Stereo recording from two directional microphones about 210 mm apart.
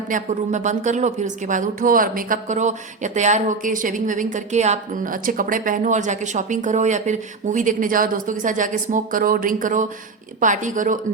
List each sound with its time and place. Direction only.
0.1 s a woman's voice: 35° right (ahead or behind)